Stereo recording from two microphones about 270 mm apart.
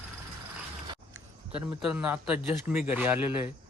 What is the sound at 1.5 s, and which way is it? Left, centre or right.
Speech, centre.